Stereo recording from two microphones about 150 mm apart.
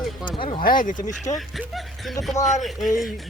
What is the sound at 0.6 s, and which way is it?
Speech, 70° left (ahead or behind).